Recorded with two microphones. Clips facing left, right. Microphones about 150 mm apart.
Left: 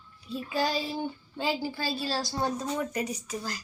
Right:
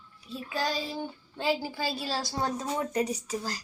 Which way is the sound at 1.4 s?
5° right (ahead or behind).